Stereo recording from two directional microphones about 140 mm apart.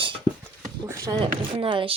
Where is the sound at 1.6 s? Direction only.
40° right (ahead or behind).